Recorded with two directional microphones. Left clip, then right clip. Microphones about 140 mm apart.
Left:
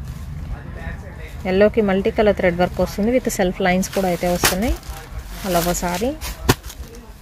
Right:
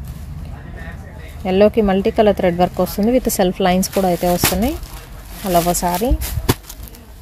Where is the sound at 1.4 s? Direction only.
25° right (ahead or behind).